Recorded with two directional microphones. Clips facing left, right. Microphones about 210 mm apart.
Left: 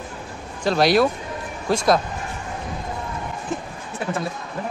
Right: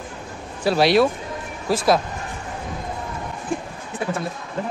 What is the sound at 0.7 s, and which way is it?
Speech, centre (ahead or behind).